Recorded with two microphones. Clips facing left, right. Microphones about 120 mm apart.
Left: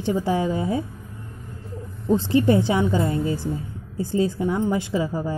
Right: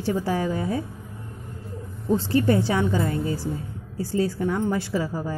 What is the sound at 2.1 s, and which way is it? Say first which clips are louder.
A woman's voice: left 2 dB; 20° left (ahead or behind).